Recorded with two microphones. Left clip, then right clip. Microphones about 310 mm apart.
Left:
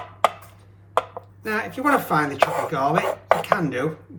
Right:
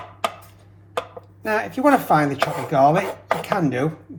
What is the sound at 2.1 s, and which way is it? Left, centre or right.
Speech, centre.